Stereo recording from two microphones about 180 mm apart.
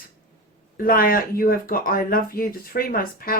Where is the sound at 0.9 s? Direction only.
50° left (ahead or behind).